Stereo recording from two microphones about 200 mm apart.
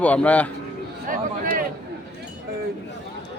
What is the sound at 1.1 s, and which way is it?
Speech, 45° right (ahead or behind).